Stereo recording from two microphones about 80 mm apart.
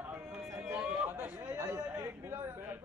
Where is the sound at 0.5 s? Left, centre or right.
Right.